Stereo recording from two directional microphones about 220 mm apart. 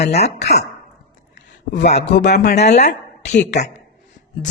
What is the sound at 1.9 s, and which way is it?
Speech, 30° left (ahead or behind).